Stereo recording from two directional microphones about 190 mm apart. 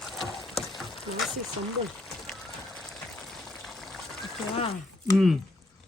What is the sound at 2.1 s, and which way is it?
Boiling, centre (ahead or behind).